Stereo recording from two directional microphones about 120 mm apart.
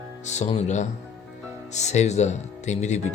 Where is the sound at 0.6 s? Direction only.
75° left (ahead or behind).